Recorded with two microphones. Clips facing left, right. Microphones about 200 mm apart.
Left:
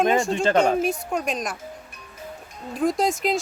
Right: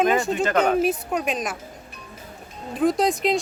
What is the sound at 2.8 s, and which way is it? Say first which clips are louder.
Speech: right 2 dB; centre (ahead or behind).